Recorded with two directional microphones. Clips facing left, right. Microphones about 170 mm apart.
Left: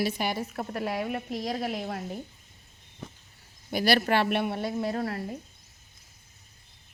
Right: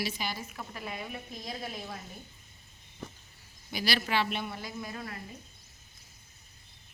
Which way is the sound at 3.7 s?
55° left (ahead or behind).